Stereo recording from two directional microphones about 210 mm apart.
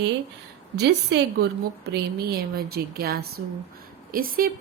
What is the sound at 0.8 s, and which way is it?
A woman's voice, 55° right (ahead or behind).